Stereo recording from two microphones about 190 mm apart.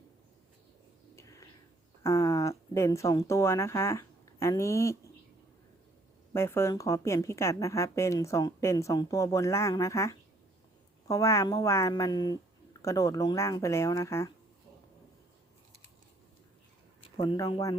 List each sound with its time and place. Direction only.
1.1 s a sound: 15° left (ahead or behind)
2.0 s speech: 15° left (ahead or behind)
6.3 s a woman's voice: 15° left (ahead or behind)
17.2 s speech: 20° left (ahead or behind)